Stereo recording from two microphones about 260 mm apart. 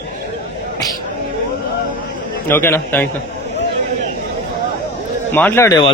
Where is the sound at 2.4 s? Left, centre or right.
Centre.